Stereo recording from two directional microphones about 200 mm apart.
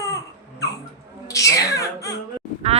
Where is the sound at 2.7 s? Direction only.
35° right (ahead or behind).